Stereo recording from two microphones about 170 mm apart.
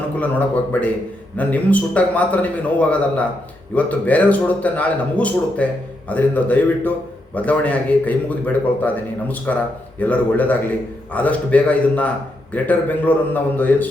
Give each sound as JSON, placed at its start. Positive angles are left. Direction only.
{"t": 0.2, "sound": "a man's voice", "side_deg": 10}